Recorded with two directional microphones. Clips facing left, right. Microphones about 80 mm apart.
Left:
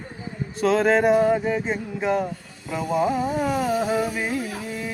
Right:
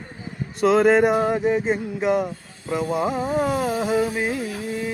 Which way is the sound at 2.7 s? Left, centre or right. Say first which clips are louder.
Even; right.